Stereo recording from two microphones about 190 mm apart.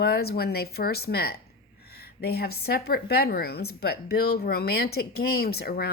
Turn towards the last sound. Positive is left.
turn(degrees=55)  # may be behind; listen again after turning